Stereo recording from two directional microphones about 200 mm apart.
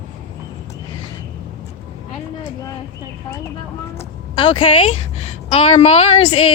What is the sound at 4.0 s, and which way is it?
Music, 25° left (ahead or behind).